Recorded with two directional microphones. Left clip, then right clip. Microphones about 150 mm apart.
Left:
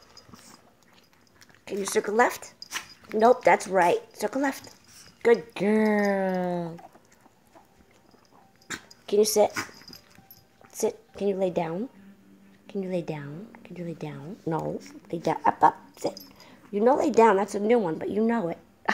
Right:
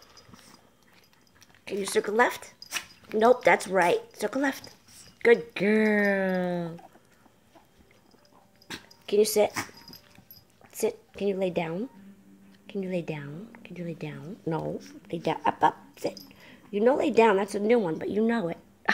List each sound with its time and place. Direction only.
1.6 s speech: 5° left (ahead or behind)
8.6 s a sound: 10° left (ahead or behind)
10.8 s speech: 5° left (ahead or behind)